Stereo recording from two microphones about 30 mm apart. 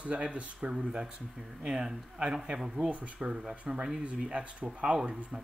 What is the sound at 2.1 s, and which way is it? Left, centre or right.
Speech, right.